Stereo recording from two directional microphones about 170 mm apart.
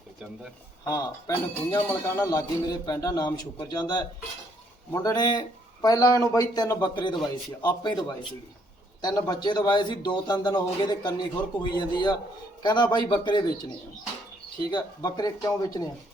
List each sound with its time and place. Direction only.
0.9 s a man's voice: 20° left (ahead or behind)
14.7 s a man's voice: 25° left (ahead or behind)